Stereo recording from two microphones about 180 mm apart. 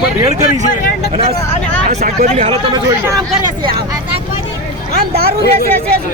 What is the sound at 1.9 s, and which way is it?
Speech, 45° right (ahead or behind).